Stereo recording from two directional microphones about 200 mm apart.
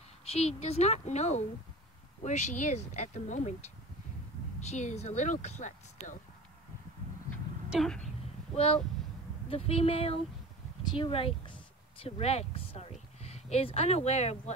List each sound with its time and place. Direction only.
0.2 s speech: 30° left (ahead or behind)
4.6 s speech: 35° left (ahead or behind)
7.7 s speech: centre (ahead or behind)
9.5 s speech: 30° left (ahead or behind)